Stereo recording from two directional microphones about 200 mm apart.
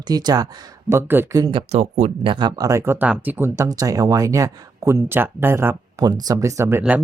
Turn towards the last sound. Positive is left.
turn(degrees=-10)  # may be behind; listen again after turning